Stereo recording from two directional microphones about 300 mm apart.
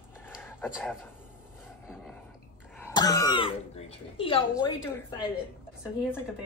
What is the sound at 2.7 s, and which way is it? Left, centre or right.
Speech, centre.